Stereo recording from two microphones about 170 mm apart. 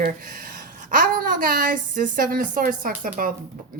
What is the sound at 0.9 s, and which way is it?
A woman's voice, 55° right (ahead or behind).